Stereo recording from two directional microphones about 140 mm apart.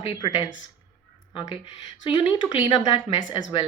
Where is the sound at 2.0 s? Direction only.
35° left (ahead or behind).